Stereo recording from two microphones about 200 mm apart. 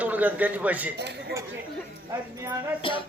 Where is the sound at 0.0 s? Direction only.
10° right (ahead or behind).